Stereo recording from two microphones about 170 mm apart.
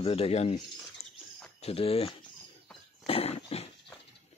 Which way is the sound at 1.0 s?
35° left (ahead or behind).